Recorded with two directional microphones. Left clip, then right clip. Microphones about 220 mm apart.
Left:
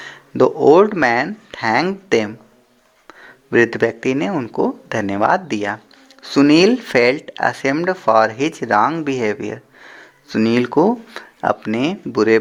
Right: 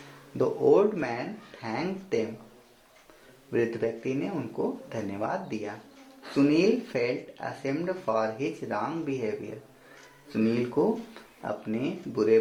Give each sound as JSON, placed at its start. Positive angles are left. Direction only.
{"t": 0.3, "sound": "speech", "side_deg": 45}
{"t": 3.5, "sound": "speech", "side_deg": 45}